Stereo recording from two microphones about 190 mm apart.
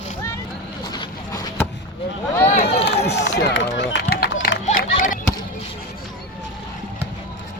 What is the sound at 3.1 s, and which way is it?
Run, 65° left (ahead or behind).